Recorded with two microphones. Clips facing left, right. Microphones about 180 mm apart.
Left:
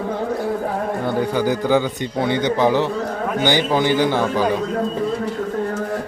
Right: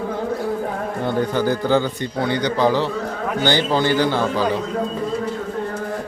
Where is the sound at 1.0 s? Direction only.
10° left (ahead or behind).